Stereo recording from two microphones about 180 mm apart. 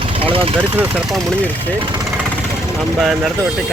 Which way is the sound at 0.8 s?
Centre (ahead or behind).